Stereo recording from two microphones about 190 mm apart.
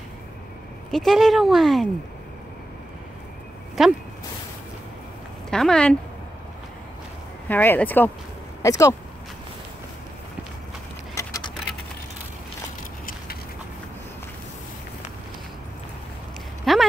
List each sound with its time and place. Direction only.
0.9 s speech: centre (ahead or behind)
3.8 s speech: centre (ahead or behind)
5.5 s speech: 5° left (ahead or behind)
7.4 s speech: 10° left (ahead or behind)
11.1 s vehicle: 15° left (ahead or behind)
16.7 s a sound: centre (ahead or behind)